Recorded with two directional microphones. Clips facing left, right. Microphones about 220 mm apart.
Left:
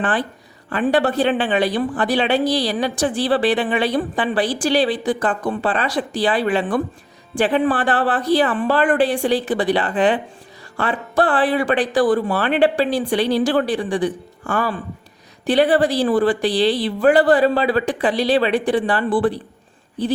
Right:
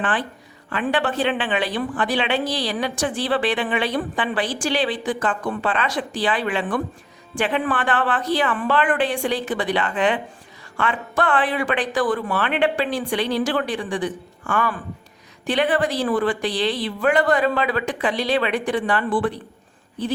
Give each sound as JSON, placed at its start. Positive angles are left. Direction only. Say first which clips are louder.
{"t": 0.0, "sound": "a woman's voice", "louder": "left 3 dB", "side_deg": 40}